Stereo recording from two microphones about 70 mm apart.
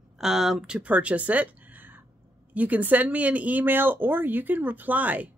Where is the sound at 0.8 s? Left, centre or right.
Centre.